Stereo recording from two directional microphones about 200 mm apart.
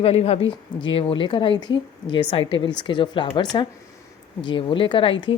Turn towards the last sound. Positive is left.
turn(degrees=25)  # may be behind; listen again after turning